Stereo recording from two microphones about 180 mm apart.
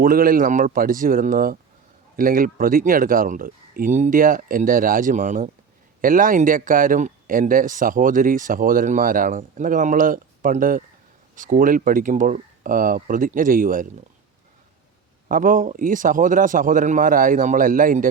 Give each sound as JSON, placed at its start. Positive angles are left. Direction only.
{"t": 0.0, "sound": "speech", "side_deg": -50}
{"t": 15.3, "sound": "speech", "side_deg": -50}